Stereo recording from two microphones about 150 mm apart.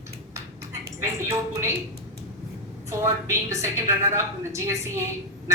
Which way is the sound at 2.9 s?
20° right (ahead or behind).